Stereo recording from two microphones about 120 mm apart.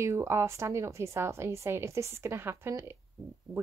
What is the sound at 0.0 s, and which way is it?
Speech, 25° right (ahead or behind).